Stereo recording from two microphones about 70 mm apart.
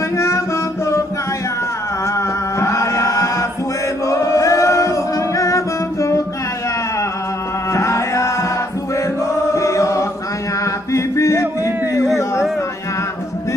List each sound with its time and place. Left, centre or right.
2.1 s chant: left
4.1 s music: left
7.7 s music: left
9.3 s chant: left
10.6 s music: left